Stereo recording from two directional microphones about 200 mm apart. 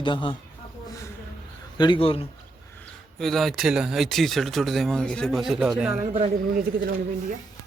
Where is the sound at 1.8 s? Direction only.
25° left (ahead or behind).